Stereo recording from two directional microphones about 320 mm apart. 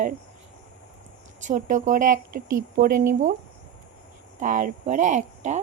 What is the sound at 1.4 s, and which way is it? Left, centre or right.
Speech, right.